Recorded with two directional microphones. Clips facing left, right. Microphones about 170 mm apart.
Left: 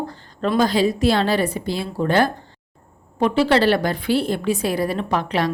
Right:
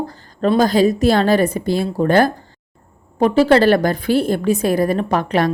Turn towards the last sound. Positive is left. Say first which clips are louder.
# right 4 dB
turn(degrees=-50)  # may be behind; listen again after turning